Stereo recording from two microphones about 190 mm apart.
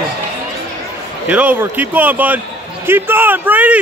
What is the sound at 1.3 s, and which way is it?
Speech, 10° right (ahead or behind).